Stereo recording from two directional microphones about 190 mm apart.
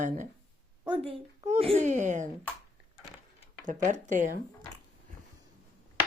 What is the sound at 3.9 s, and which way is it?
Speech, 40° right (ahead or behind).